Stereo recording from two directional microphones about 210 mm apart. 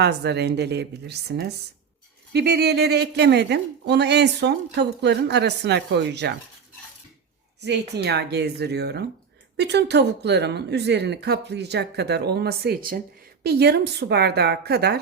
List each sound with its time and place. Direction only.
0.0 s speech: 50° right (ahead or behind)
7.6 s speech: 55° right (ahead or behind)